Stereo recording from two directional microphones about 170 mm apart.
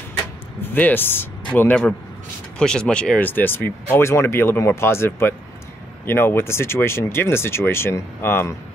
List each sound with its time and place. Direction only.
0.6 s speech: 10° left (ahead or behind)